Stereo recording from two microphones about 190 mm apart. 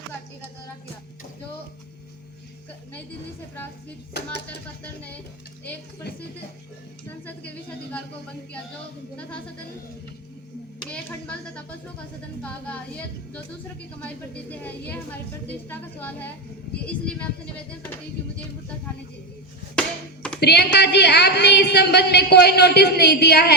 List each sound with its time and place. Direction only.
3.5 s a woman's voice: 10° left (ahead or behind)
4.4 s a sound: 5° left (ahead or behind)
7.3 s a woman's voice: 5° left (ahead or behind)
10.8 s a woman's voice: 5° left (ahead or behind)
20.4 s a woman's voice: 60° left (ahead or behind)